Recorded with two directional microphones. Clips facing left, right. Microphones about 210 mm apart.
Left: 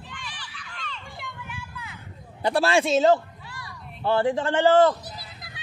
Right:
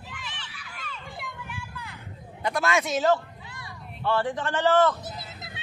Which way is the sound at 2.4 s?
30° left (ahead or behind).